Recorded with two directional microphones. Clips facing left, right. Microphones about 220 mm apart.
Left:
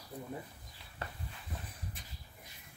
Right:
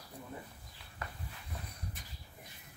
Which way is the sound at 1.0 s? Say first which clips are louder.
Left 1 dB; 30° left (ahead or behind).